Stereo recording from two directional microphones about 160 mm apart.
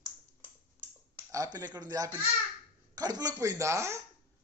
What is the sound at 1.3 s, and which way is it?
Speech, 20° right (ahead or behind).